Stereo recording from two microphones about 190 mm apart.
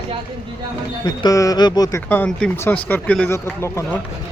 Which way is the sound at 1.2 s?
20° left (ahead or behind).